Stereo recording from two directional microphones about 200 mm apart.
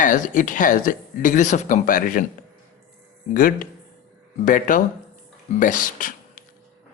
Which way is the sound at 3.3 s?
45° left (ahead or behind).